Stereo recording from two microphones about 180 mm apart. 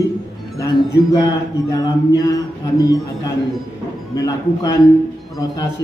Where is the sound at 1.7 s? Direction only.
20° left (ahead or behind).